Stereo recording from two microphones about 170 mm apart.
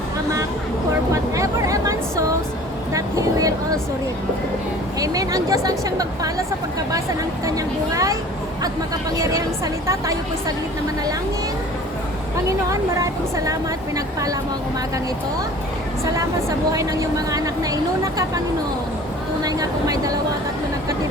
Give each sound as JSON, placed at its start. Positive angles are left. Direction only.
{"t": 1.1, "sound": "speech", "side_deg": -20}
{"t": 4.9, "sound": "speech", "side_deg": -20}
{"t": 7.4, "sound": "speech", "side_deg": -20}
{"t": 9.8, "sound": "speech", "side_deg": -15}
{"t": 12.7, "sound": "speech", "side_deg": -20}
{"t": 16.7, "sound": "speech", "side_deg": -20}
{"t": 19.4, "sound": "a sound", "side_deg": -20}